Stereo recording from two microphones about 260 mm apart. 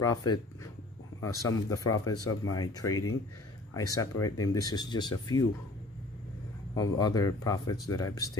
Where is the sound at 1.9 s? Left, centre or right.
Left.